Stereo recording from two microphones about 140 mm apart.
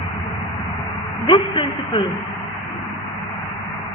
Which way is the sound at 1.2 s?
35° left (ahead or behind).